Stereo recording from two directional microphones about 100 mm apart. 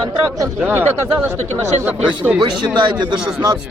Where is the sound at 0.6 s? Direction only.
20° right (ahead or behind).